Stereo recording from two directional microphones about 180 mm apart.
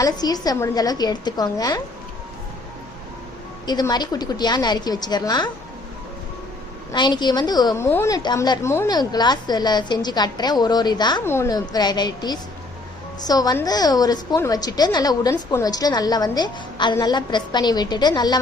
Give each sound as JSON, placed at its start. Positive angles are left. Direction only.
{"t": 0.0, "sound": "a woman's voice", "side_deg": 20}
{"t": 3.7, "sound": "a woman's voice", "side_deg": 20}
{"t": 6.9, "sound": "a woman's voice", "side_deg": 25}
{"t": 11.2, "sound": "a woman's voice", "side_deg": 15}